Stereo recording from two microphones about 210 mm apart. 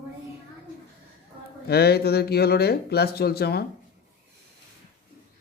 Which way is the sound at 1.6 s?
50° left (ahead or behind).